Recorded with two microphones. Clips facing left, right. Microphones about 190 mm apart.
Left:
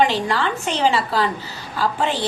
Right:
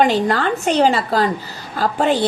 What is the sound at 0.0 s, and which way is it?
A woman's voice, 45° right (ahead or behind).